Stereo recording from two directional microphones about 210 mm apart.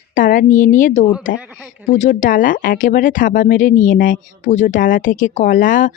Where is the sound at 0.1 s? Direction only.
40° left (ahead or behind).